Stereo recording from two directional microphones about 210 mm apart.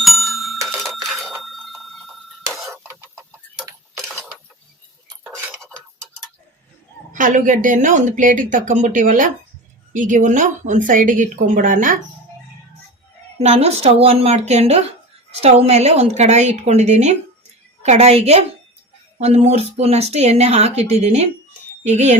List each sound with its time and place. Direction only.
0.0 s bicycle bell: centre (ahead or behind)
0.7 s a sound: centre (ahead or behind)
5.2 s cutlery: 5° right (ahead or behind)
5.5 s cutlery: 5° left (ahead or behind)
7.1 s a woman's voice: 40° right (ahead or behind)
13.4 s a woman's voice: 30° right (ahead or behind)